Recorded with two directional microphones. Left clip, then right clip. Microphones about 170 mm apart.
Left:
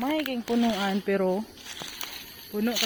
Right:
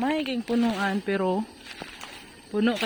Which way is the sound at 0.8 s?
5° right (ahead or behind).